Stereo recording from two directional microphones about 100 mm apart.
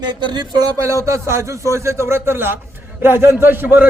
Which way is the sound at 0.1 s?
45° right (ahead or behind).